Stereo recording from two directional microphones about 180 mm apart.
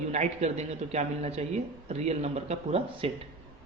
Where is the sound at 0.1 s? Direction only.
40° right (ahead or behind).